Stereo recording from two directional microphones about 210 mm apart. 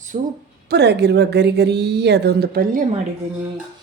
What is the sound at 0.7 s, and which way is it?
Speech, 55° right (ahead or behind).